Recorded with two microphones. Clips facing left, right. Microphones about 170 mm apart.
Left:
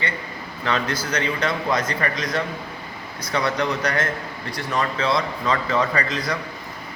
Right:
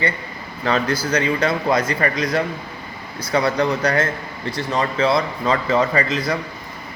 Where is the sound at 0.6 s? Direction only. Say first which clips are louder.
Right 4 dB; 35° right (ahead or behind).